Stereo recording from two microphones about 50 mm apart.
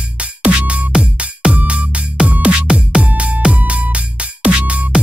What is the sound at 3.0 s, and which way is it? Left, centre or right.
Music, right.